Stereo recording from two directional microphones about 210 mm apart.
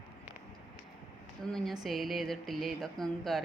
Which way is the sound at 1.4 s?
Centre (ahead or behind).